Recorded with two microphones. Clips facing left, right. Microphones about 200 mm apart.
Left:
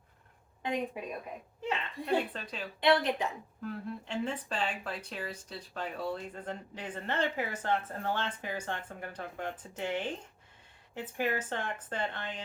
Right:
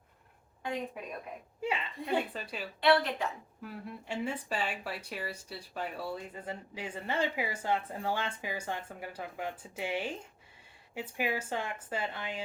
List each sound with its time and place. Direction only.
1.6 s speech: 10° right (ahead or behind)
2.8 s a woman's voice: 20° left (ahead or behind)
3.6 s speech: 5° right (ahead or behind)